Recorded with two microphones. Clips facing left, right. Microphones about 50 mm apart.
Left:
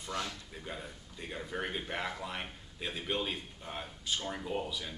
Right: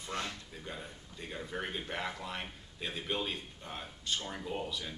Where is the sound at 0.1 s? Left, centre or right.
Right.